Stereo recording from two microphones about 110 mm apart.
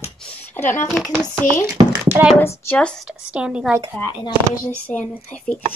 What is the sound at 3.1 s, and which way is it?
Speech, 5° right (ahead or behind).